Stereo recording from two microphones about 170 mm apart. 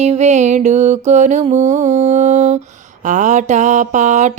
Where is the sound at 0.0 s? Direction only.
40° right (ahead or behind).